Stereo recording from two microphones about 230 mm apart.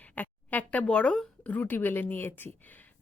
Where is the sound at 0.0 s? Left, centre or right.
Centre.